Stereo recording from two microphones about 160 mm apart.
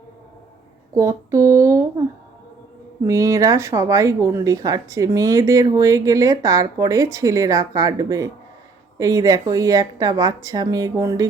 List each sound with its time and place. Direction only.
0.9 s speech: 20° right (ahead or behind)
3.1 s speech: 20° right (ahead or behind)